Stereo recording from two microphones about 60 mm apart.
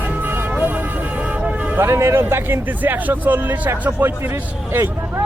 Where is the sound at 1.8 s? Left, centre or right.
Right.